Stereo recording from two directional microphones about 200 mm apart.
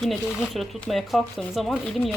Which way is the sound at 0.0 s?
Centre (ahead or behind).